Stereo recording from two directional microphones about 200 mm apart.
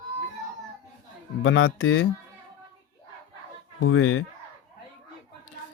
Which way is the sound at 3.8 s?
90° left.